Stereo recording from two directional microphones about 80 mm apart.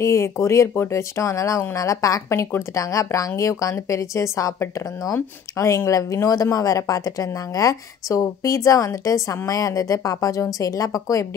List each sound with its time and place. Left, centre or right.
0.0 s a woman's voice: left